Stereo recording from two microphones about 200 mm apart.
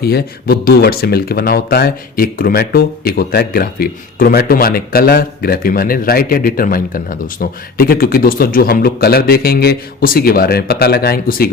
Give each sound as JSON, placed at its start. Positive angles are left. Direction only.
{"t": 0.0, "sound": "speech", "side_deg": 50}